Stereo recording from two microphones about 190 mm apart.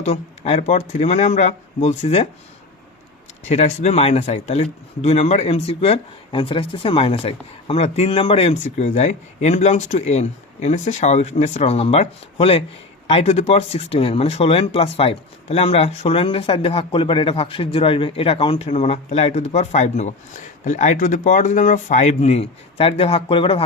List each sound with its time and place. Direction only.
0.0 s speech: 35° left (ahead or behind)
3.5 s speech: 35° left (ahead or behind)